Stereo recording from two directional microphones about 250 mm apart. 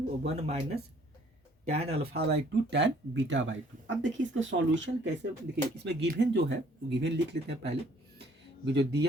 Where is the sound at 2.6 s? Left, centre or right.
Right.